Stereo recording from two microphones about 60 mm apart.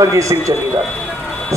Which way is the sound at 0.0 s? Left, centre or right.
Right.